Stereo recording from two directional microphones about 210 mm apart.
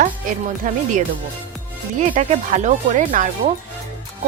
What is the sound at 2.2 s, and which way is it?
Speech, 35° right (ahead or behind).